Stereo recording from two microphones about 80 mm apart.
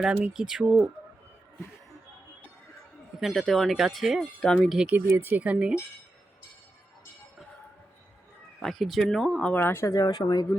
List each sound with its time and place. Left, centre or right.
0.0 s speech: centre
3.2 s speech: centre
4.9 s speech: right
8.6 s speech: centre
9.5 s speech: left
9.8 s speech: left